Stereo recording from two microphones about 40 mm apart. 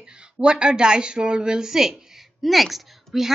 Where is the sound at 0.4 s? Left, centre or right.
Right.